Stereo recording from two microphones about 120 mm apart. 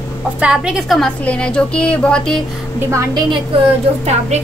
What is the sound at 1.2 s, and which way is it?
Speech, 10° left (ahead or behind).